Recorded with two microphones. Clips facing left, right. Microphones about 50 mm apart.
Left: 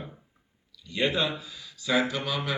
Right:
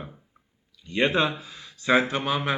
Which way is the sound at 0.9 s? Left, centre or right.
Right.